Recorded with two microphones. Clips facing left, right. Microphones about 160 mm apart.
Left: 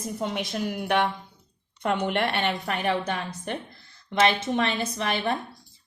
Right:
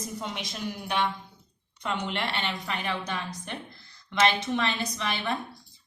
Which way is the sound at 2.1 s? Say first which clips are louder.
Left 6 dB; 55° left (ahead or behind).